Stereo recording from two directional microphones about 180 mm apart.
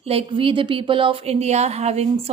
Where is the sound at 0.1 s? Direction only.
30° right (ahead or behind).